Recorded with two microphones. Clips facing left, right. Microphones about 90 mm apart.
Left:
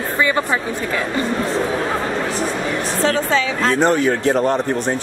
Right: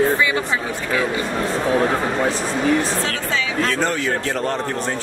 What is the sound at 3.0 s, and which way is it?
Speech, 35° left (ahead or behind).